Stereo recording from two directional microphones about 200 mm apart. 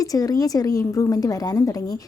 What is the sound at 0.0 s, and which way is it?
A woman's voice, 15° left (ahead or behind).